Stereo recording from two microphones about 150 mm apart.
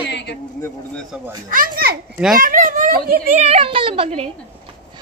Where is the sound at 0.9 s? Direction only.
5° left (ahead or behind).